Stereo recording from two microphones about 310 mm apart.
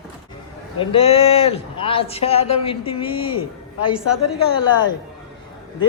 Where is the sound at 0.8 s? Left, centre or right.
Centre.